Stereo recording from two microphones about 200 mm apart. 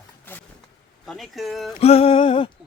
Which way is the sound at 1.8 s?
30° left (ahead or behind).